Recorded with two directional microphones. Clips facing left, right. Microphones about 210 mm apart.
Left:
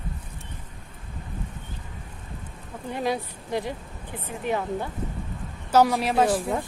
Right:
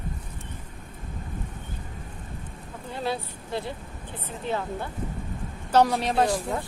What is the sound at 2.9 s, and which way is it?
A woman's voice, 15° left (ahead or behind).